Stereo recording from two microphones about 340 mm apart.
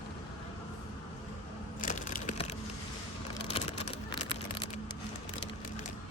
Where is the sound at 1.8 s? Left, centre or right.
Left.